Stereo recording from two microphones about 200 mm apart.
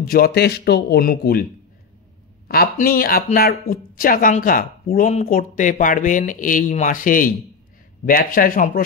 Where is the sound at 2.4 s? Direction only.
50° left (ahead or behind).